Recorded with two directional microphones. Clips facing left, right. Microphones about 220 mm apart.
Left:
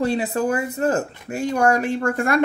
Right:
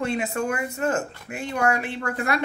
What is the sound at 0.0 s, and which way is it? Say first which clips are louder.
Speech: left 5 dB; 35° left (ahead or behind).